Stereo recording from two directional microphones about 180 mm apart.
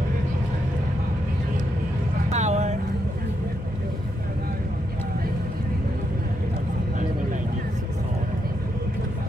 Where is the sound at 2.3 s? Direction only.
40° right (ahead or behind).